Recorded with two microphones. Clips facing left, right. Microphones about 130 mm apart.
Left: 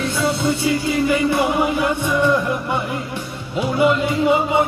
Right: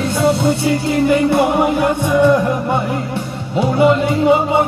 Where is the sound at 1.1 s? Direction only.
50° right (ahead or behind).